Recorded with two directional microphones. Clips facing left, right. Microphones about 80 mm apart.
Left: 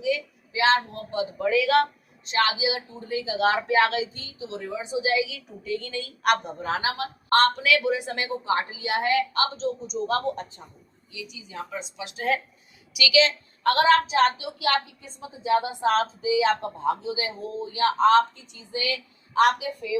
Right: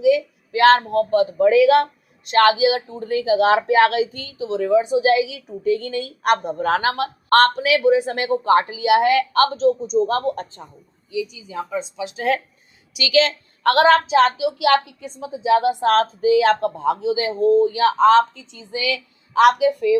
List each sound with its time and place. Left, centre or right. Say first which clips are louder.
0.0 s speech: right 10 dB; right
1.5 s a woman's voice: right 6 dB; right
2.2 s a woman's voice: right 9 dB; right
4.1 s a woman's voice: right 10 dB; right
5.2 s a woman's voice: right 10 dB; right
6.6 s a woman's voice: right 8 dB; right
8.4 s speech: right 11 dB; right
9.9 s a woman's voice: right 7 dB; right
13.0 s a woman's voice: right 4 dB; right
13.7 s a woman's voice: right 5 dB; right